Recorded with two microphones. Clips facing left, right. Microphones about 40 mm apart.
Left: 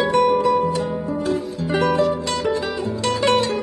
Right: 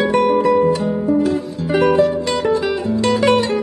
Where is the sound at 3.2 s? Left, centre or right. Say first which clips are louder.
Right 2 dB; centre.